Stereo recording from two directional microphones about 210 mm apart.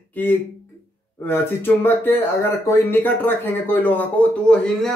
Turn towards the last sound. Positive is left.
turn(degrees=5)  # may be behind; listen again after turning